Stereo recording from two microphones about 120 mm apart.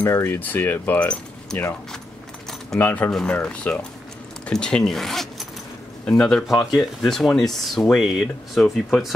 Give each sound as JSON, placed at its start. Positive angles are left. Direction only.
{"t": 0.0, "sound": "speech", "side_deg": 20}
{"t": 2.8, "sound": "speech", "side_deg": 15}
{"t": 3.1, "sound": "speech", "side_deg": 5}